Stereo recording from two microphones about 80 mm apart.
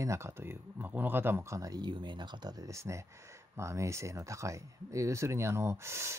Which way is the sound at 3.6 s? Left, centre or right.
Right.